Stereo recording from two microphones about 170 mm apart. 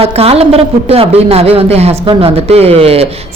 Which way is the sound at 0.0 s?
35° right (ahead or behind).